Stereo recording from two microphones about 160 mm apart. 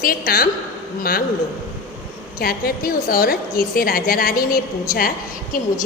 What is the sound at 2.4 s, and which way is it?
A woman's voice, 70° left (ahead or behind).